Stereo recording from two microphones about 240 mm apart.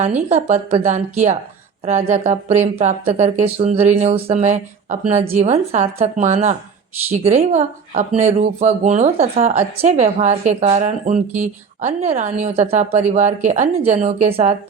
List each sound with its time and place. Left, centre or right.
0.0 s a woman's voice: right